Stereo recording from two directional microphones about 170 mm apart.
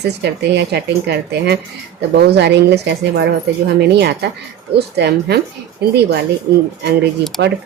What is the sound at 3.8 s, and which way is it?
Speech, 75° right (ahead or behind).